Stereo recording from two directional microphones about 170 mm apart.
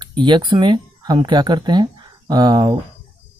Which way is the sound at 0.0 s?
25° right (ahead or behind).